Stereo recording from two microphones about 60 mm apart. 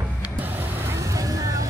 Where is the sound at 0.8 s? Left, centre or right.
Right.